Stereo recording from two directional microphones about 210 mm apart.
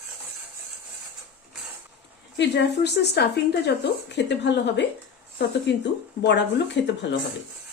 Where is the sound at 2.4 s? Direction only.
55° left (ahead or behind).